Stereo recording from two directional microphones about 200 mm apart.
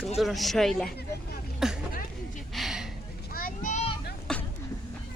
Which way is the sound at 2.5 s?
Centre (ahead or behind).